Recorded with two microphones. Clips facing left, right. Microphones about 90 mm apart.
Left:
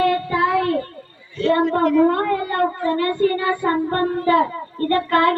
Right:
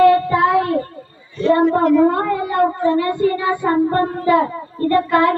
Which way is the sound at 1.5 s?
10° right (ahead or behind).